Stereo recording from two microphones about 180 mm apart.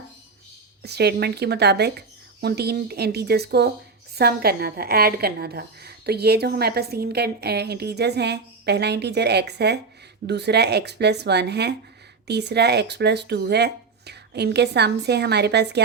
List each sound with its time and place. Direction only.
0.8 s a woman's voice: 65° right (ahead or behind)